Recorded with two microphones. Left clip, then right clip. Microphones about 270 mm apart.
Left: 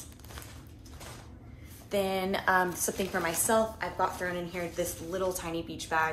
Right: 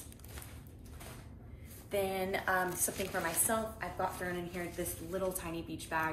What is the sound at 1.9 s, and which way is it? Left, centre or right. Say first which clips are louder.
A woman's voice: left 5 dB; left.